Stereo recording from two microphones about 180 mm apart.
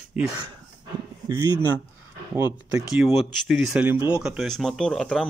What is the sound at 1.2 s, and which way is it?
Speech, 15° right (ahead or behind).